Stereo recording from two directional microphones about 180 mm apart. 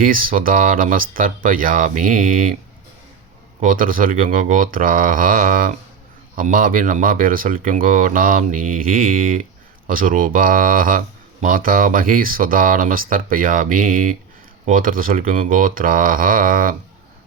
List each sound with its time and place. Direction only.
0.0 s speech: 50° right (ahead or behind)
3.6 s speech: 50° right (ahead or behind)